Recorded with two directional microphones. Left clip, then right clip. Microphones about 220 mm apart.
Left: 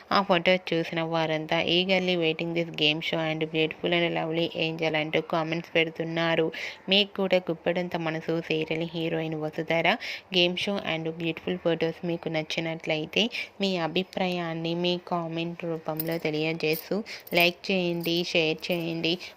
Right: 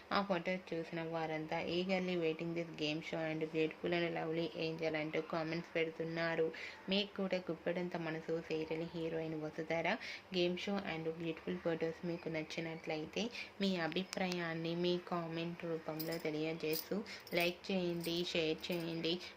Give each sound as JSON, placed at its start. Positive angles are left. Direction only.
{"t": 0.1, "sound": "speech", "side_deg": 35}